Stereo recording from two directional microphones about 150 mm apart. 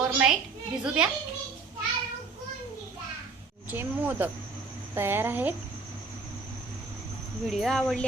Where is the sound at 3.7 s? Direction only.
15° right (ahead or behind).